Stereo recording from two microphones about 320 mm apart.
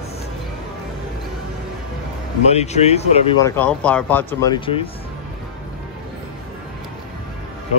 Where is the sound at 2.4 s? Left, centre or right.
Centre.